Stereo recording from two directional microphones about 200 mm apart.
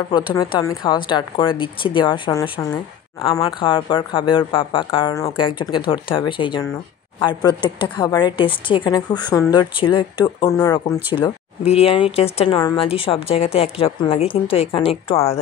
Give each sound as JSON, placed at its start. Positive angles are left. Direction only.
{"t": 0.4, "sound": "speech", "side_deg": 20}
{"t": 11.1, "sound": "speech", "side_deg": 25}